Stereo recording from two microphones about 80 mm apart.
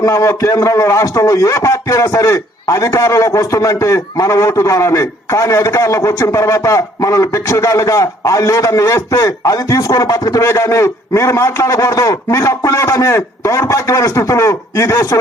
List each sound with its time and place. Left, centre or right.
0.0 s a man's voice: left